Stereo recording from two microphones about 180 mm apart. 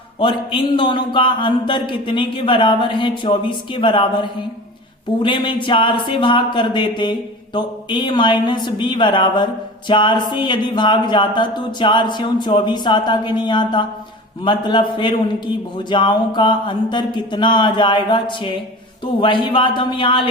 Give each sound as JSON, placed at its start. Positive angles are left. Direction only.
{"t": 0.2, "sound": "speech", "side_deg": 25}